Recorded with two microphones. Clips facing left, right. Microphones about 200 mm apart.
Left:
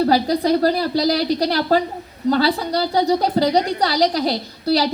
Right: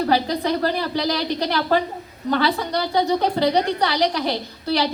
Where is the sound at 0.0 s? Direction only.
35° left (ahead or behind).